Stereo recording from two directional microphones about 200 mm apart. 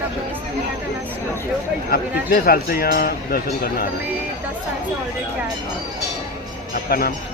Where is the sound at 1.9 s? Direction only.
50° left (ahead or behind).